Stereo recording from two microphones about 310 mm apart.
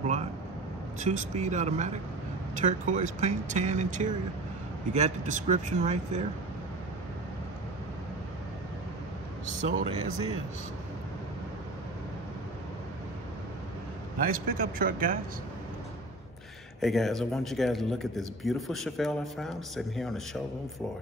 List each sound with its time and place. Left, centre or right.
0.0 s vehicle: right
0.9 s speech: right
9.6 s speech: right
14.1 s speech: right
16.8 s speech: centre